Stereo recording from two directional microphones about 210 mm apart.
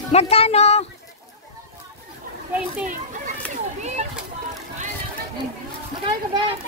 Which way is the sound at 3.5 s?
35° right (ahead or behind).